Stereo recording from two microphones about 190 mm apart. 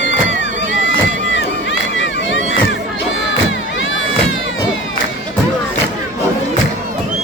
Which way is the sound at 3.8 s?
90° left.